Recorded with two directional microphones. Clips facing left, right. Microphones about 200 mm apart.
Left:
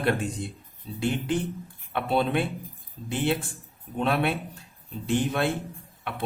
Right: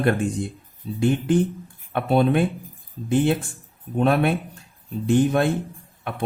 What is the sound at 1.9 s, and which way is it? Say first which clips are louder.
A man's voice: right 6 dB; 50° right (ahead or behind).